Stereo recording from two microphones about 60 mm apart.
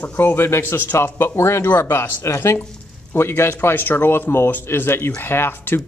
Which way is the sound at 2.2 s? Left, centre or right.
Left.